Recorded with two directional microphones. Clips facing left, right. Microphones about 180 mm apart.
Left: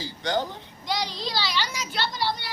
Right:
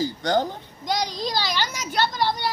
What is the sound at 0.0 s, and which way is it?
A child's voice, 45° right (ahead or behind).